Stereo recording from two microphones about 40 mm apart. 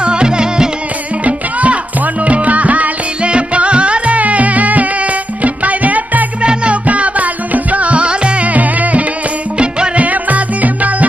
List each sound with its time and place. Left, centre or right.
0.0 s music: right
1.2 s music: right
3.2 s music: right
6.4 s music: right
9.6 s music: right
10.0 s music: right